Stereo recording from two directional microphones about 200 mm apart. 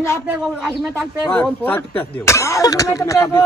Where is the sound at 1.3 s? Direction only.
5° left (ahead or behind).